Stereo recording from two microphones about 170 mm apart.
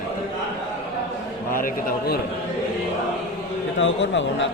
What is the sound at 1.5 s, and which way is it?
Speech, 55° left (ahead or behind).